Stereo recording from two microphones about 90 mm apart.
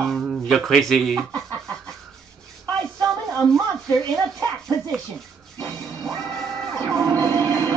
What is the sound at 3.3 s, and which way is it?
Speech, 5° left (ahead or behind).